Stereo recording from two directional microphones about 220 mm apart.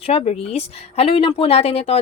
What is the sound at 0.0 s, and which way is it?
A woman's voice, 25° left (ahead or behind).